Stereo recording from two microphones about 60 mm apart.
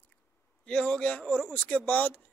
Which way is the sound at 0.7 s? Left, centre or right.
Centre.